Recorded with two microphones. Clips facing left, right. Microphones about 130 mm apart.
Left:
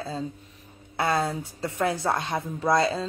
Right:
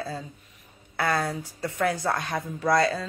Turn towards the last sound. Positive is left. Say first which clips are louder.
# even
turn(degrees=25)  # may be behind; listen again after turning